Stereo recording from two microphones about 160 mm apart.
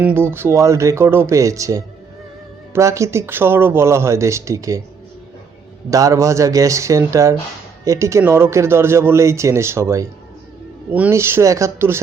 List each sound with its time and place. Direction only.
0.0 s speech: 15° right (ahead or behind)
5.9 s speech: 20° right (ahead or behind)